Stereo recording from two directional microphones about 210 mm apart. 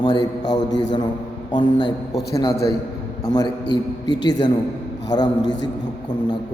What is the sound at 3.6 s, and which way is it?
Speech, 55° left (ahead or behind).